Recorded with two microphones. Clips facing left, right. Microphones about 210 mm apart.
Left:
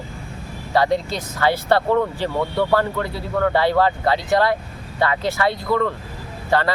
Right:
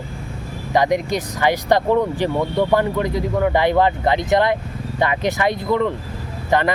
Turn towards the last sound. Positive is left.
turn(degrees=-20)  # may be behind; listen again after turning